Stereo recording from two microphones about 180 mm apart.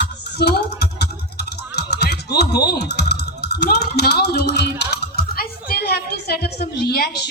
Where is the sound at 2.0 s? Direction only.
65° left (ahead or behind).